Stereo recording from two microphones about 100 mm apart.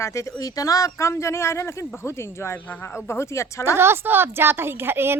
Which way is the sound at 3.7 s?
25° right (ahead or behind).